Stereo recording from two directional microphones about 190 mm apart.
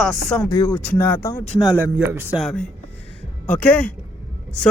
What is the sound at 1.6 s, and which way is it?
Speech, 10° right (ahead or behind).